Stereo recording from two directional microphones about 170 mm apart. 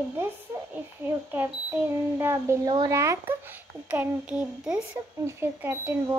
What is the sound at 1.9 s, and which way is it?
Speech, 15° right (ahead or behind).